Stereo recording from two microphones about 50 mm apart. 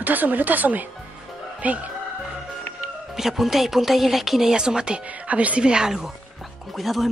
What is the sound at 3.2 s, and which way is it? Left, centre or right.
Speech, centre.